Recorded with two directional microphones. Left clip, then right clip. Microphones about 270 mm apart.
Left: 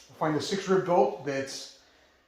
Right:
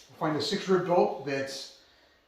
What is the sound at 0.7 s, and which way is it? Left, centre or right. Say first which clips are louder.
Speech: left 1 dB; centre.